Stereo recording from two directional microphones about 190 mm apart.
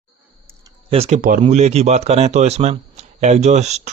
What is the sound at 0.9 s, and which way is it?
Speech, 35° right (ahead or behind).